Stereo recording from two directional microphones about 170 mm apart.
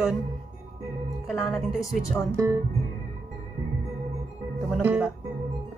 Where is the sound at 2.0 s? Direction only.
15° left (ahead or behind).